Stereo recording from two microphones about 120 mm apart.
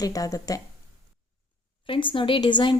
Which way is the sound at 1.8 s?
45° left (ahead or behind).